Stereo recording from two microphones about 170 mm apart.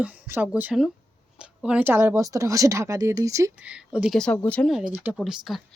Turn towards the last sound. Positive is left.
turn(degrees=0)  # may be behind; listen again after turning